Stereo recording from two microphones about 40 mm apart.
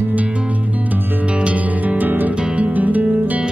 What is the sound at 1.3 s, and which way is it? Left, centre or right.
Music, right.